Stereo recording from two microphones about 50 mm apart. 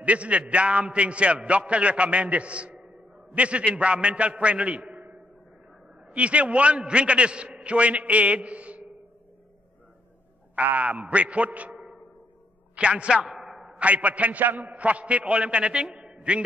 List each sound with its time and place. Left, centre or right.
0.0 s a man's voice: right
6.0 s a man's voice: right
10.5 s a man's voice: right
13.3 s a sound: centre
13.7 s a man's voice: right